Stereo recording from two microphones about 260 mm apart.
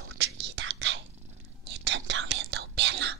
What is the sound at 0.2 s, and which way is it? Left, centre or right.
Whispering, right.